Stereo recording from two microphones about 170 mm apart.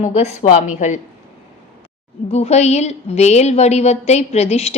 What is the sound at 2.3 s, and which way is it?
A woman's voice, 40° left (ahead or behind).